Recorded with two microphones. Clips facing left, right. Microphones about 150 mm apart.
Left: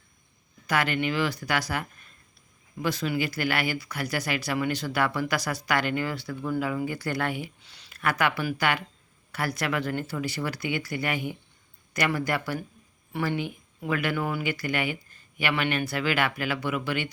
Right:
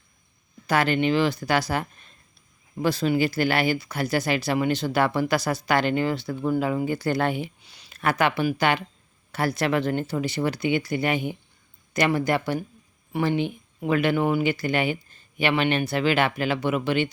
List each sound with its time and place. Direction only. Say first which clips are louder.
0.7 s speech: right 5 dB; 30° right (ahead or behind)
7.6 s a sound: right 1 dB; 15° right (ahead or behind)
7.9 s speech: right 3 dB; 25° right (ahead or behind)